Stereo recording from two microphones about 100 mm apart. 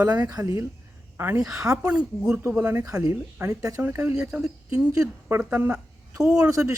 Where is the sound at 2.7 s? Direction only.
35° right (ahead or behind).